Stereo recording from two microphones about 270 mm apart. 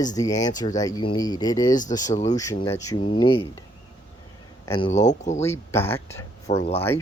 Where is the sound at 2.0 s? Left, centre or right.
Left.